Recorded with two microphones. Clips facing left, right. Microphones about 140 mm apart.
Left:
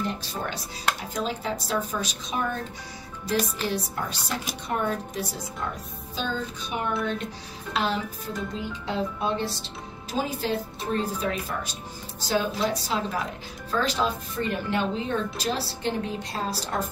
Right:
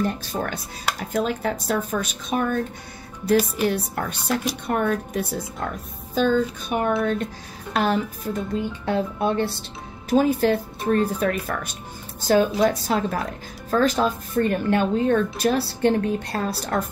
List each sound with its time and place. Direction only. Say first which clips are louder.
0.0 s speech: right 5 dB; 50° right (ahead or behind)
3.6 s speech: right 5 dB; 55° right (ahead or behind)